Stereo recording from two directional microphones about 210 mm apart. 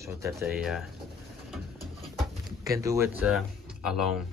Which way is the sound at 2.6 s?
15° right (ahead or behind).